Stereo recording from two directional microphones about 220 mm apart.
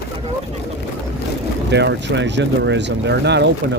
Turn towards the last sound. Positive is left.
turn(degrees=-50)  # may be behind; listen again after turning